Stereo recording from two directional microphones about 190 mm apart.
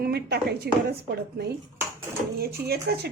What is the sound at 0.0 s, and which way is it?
Speech, 55° right (ahead or behind).